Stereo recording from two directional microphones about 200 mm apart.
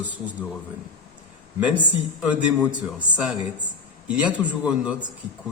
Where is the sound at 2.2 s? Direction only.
5° right (ahead or behind).